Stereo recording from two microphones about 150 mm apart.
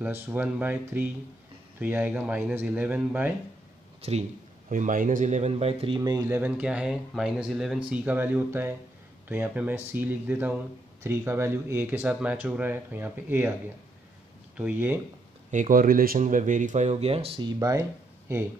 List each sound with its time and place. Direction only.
0.0 s speech: 10° right (ahead or behind)
4.6 s speech: 60° right (ahead or behind); by 5.9 s 40° right (ahead or behind)
5.9 s speech: 25° right (ahead or behind)
6.3 s speech: 10° right (ahead or behind)
14.6 s speech: 10° right (ahead or behind)
15.5 s speech: 65° right (ahead or behind); by 17.8 s 25° right (ahead or behind)